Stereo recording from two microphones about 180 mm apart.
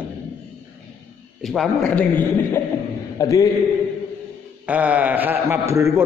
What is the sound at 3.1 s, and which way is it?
Speech, 20° left (ahead or behind).